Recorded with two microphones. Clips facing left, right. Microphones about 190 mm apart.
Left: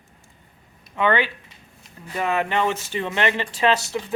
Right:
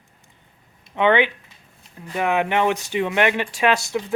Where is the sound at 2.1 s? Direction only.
15° right (ahead or behind).